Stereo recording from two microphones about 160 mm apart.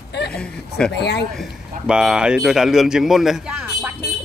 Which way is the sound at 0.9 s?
90° left.